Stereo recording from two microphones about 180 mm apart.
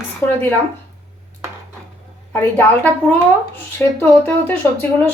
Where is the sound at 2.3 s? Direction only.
10° left (ahead or behind).